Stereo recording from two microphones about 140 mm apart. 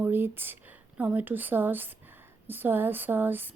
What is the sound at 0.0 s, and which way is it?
Speech, 15° right (ahead or behind).